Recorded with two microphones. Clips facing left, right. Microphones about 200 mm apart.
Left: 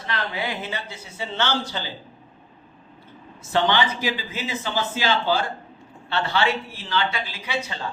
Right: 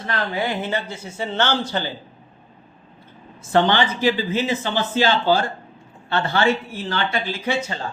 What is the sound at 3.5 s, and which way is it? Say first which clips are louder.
A man's voice: right 3 dB; 50° right (ahead or behind).